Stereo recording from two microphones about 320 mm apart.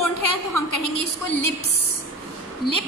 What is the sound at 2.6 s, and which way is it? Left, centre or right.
Speech, left.